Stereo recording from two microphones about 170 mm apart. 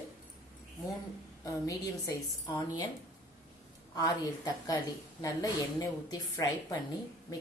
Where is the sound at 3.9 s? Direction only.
20° left (ahead or behind).